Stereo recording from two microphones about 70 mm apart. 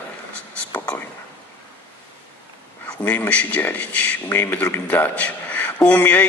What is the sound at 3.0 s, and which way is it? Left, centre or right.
A man's voice, left.